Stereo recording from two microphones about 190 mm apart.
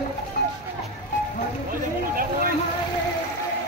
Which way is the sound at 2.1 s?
50° right (ahead or behind).